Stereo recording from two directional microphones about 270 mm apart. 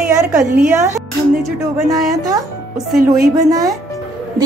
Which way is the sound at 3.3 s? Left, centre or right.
Centre.